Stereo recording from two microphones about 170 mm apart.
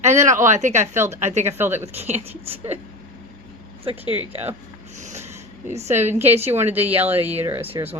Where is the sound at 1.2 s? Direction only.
45° right (ahead or behind).